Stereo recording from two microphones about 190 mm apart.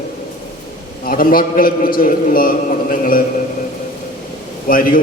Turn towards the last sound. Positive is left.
turn(degrees=50)  # may be behind; listen again after turning